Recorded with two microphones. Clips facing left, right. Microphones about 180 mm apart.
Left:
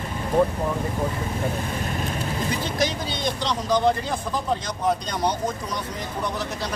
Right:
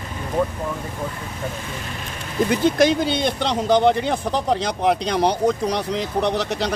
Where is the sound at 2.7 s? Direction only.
60° right (ahead or behind).